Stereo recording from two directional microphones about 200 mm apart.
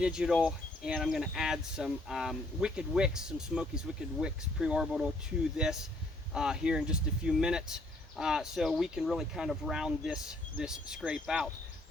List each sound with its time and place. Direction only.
0.0 s speech: 5° right (ahead or behind)